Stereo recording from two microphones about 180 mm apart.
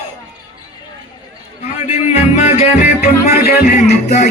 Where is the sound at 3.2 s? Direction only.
55° left (ahead or behind).